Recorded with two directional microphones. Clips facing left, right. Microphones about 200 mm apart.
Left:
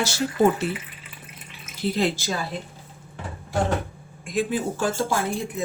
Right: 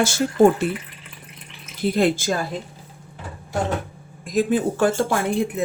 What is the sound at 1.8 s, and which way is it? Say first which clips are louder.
Speech: right 5 dB; 50° right (ahead or behind).